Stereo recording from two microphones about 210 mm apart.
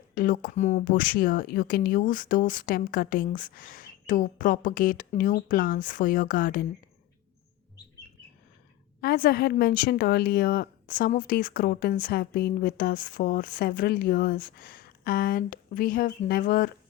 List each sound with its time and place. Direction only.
0.1 s speech: 40° left (ahead or behind)
9.0 s a woman's voice: 45° left (ahead or behind)